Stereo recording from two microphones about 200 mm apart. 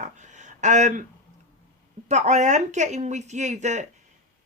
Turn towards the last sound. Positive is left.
turn(degrees=-35)  # may be behind; listen again after turning